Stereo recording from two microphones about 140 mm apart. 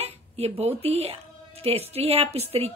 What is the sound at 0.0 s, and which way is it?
A woman's voice, 50° right (ahead or behind).